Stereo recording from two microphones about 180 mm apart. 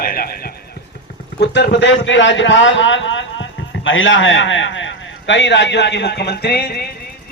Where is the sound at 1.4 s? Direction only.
75° left (ahead or behind).